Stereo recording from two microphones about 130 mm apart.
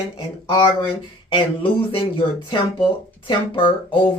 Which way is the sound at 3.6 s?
40° left (ahead or behind).